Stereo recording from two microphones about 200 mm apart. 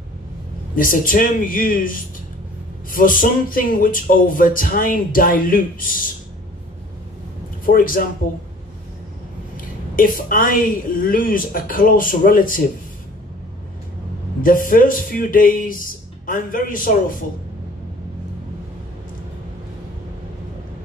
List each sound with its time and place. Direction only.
0.7 s speech: 45° left (ahead or behind)
7.6 s speech: 45° left (ahead or behind)
9.9 s speech: 45° left (ahead or behind)
14.4 s speech: 45° left (ahead or behind)